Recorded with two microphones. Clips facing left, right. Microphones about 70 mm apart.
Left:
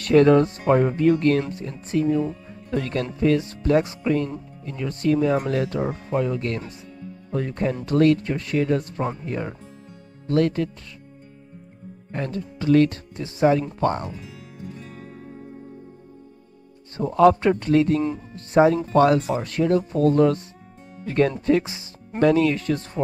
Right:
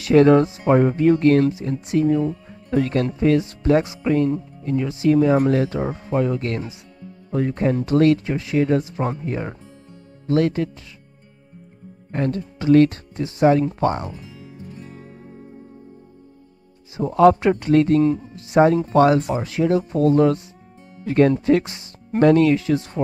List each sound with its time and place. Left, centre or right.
0.0 s speech: centre
5.8 s speech: centre
6.1 s speech: centre
12.1 s speech: centre
16.9 s speech: centre